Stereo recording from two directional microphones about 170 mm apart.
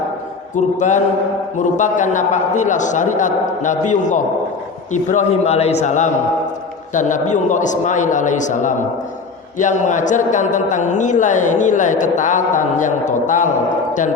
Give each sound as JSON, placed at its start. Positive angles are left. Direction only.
{"t": 0.5, "sound": "a man's voice", "side_deg": 45}